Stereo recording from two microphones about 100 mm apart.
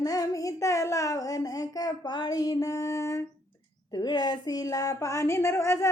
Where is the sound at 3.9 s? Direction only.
40° left (ahead or behind).